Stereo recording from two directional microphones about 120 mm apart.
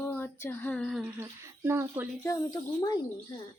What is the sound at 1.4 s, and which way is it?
Speech, 20° right (ahead or behind).